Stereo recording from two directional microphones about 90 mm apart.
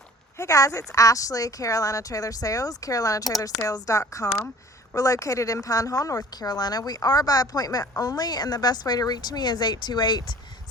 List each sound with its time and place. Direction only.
0.3 s a woman's voice: 40° left (ahead or behind)